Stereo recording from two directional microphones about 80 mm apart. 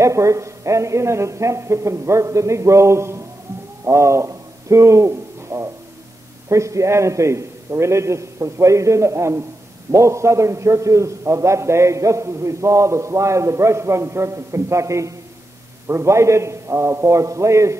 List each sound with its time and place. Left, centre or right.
0.0 s a man's voice: right
3.8 s a sound: right
6.5 s a man's voice: right